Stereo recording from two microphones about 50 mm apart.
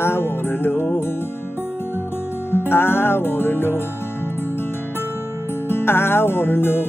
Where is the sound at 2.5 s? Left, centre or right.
Left.